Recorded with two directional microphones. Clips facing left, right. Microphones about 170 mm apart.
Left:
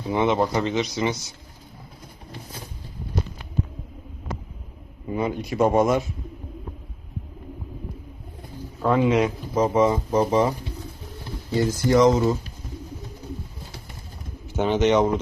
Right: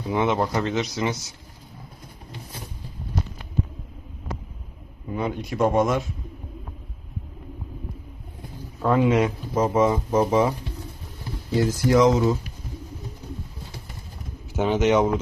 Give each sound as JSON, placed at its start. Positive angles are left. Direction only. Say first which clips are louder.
{"t": 0.1, "sound": "speech", "louder": "left 1 dB", "side_deg": 0}
{"t": 5.1, "sound": "speech", "louder": "left 2 dB", "side_deg": 0}
{"t": 8.8, "sound": "speech", "louder": "even", "side_deg": 0}
{"t": 11.5, "sound": "speech", "louder": "even", "side_deg": 0}
{"t": 14.5, "sound": "speech", "louder": "even", "side_deg": -5}